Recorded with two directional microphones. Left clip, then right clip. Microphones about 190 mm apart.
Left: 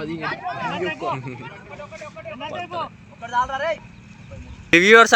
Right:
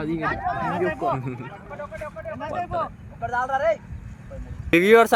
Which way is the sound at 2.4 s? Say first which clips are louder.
Right 2 dB; 55° right (ahead or behind).